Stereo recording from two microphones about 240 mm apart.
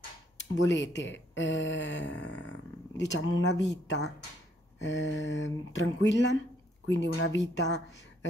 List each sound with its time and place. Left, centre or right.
0.7 s speech: left